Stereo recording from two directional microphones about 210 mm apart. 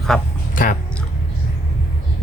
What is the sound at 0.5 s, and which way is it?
Speech, 40° left (ahead or behind).